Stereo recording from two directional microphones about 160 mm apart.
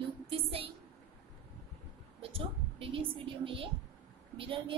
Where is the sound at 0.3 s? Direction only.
35° right (ahead or behind).